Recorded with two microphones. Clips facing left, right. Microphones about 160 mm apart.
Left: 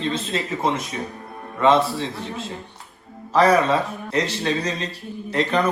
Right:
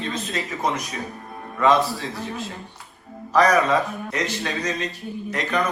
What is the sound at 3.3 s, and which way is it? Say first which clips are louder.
A man's voice: left 1 dB; 30° left (ahead or behind).